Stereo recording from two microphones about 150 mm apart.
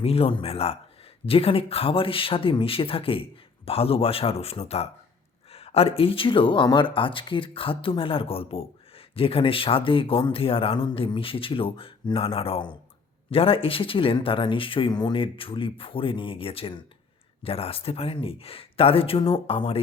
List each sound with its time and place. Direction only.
0.0 s speech: 40° left (ahead or behind)